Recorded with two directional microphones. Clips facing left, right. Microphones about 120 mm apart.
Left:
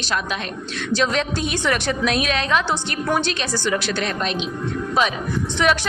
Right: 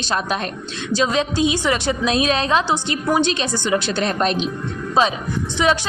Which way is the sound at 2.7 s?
15° right (ahead or behind).